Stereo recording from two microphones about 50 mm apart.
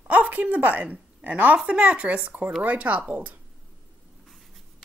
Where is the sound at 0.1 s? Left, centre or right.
Right.